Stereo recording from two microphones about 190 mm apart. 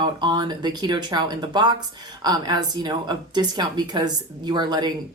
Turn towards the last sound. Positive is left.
turn(degrees=-20)  # may be behind; listen again after turning